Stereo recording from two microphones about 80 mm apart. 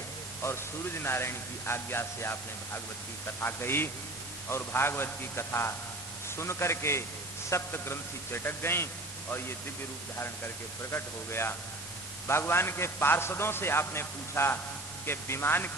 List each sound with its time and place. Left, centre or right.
0.4 s a man's voice: left
10.2 s a man's voice: left